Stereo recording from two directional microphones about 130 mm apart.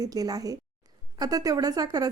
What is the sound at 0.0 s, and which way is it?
Speech, 30° right (ahead or behind).